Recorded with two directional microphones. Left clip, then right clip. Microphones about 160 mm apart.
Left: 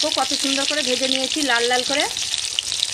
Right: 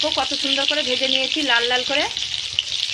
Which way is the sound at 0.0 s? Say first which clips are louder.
Even; 40° left (ahead or behind).